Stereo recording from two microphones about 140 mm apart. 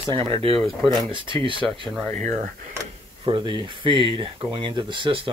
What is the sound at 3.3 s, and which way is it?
Speech, 30° right (ahead or behind).